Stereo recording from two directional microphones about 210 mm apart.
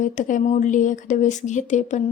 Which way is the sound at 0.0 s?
35° left (ahead or behind).